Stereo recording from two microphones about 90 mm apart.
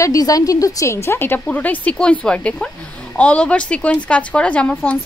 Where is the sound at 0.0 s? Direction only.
40° left (ahead or behind).